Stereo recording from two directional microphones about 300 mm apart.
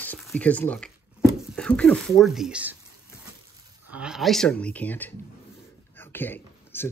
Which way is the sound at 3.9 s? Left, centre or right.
Centre.